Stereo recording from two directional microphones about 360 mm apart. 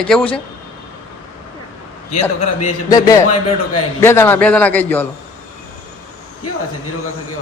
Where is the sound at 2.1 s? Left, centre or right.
Centre.